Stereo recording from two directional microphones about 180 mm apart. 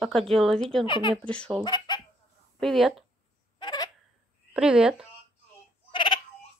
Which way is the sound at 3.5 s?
25° left (ahead or behind).